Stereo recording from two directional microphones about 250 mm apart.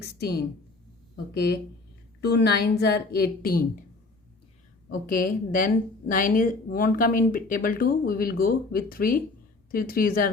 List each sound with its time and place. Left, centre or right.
0.0 s a woman's voice: left
4.9 s a woman's voice: left